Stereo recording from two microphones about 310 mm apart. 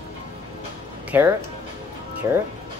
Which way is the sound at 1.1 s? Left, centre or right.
Centre.